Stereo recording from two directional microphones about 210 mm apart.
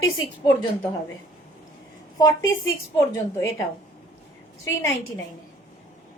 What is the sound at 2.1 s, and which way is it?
Speech, 15° left (ahead or behind).